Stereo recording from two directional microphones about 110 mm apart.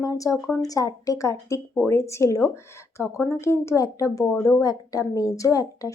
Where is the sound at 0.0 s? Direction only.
30° left (ahead or behind).